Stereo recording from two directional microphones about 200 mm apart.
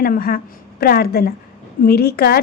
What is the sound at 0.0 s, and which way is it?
A woman's voice, 50° left (ahead or behind).